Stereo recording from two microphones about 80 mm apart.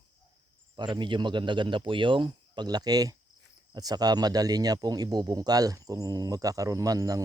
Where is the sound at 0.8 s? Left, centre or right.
Right.